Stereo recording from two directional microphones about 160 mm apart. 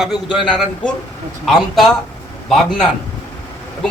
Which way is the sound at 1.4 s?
Centre (ahead or behind).